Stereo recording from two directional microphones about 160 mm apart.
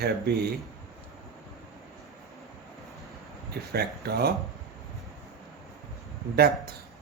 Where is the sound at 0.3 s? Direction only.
85° right.